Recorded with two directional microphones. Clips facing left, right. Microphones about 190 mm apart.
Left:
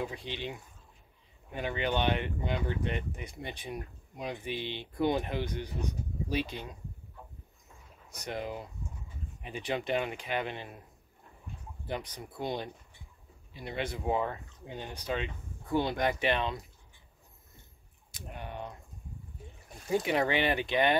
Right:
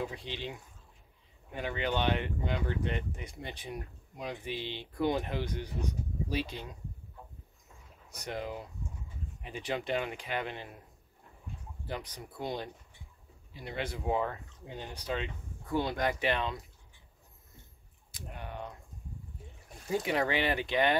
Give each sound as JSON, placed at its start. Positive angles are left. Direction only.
{"t": 0.0, "sound": "speech", "side_deg": 15}
{"t": 8.3, "sound": "speech", "side_deg": 20}
{"t": 11.9, "sound": "speech", "side_deg": 20}
{"t": 13.7, "sound": "speech", "side_deg": 20}
{"t": 20.1, "sound": "speech", "side_deg": 20}